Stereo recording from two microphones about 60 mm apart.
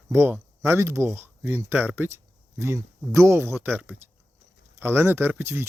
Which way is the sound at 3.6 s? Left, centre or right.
Right.